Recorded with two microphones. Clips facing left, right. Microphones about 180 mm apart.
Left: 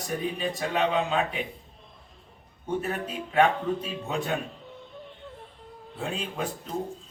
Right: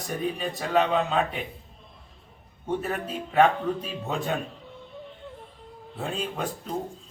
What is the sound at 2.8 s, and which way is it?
Speech, centre (ahead or behind).